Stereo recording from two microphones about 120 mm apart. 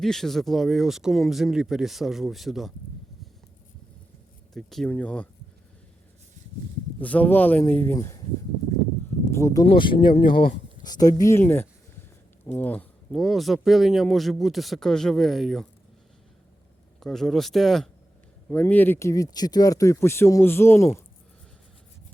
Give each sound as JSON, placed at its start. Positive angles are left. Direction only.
{"t": 0.0, "sound": "speech", "side_deg": 5}
{"t": 4.5, "sound": "speech", "side_deg": 0}
{"t": 7.0, "sound": "speech", "side_deg": 10}
{"t": 7.9, "sound": "speech", "side_deg": 25}
{"t": 9.3, "sound": "speech", "side_deg": 25}
{"t": 9.6, "sound": "speech", "side_deg": 45}
{"t": 10.8, "sound": "speech", "side_deg": 35}
{"t": 11.2, "sound": "speech", "side_deg": 20}
{"t": 13.1, "sound": "speech", "side_deg": 0}
{"t": 17.0, "sound": "speech", "side_deg": 5}
{"t": 18.4, "sound": "speech", "side_deg": 15}